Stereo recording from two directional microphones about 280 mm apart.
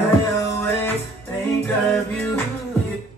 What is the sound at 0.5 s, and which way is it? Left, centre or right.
Music, centre.